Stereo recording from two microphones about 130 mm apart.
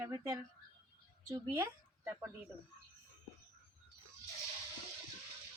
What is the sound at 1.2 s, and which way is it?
Speech, 30° right (ahead or behind).